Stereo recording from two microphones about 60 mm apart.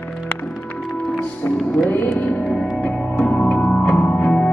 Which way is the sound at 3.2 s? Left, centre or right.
Left.